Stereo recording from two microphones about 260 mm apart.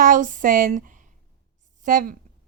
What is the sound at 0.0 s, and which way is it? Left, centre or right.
A woman's voice, right.